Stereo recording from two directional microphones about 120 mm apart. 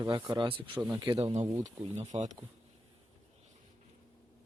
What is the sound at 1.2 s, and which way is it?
Speech, 65° right (ahead or behind).